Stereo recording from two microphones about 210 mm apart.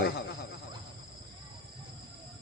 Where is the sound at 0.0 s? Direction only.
50° left (ahead or behind).